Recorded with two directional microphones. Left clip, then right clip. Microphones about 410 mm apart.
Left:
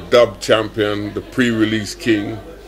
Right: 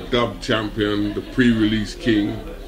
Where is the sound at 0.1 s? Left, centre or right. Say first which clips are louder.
Left 8 dB; left.